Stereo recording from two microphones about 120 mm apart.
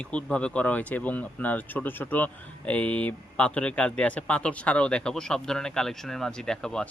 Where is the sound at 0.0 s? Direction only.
10° left (ahead or behind).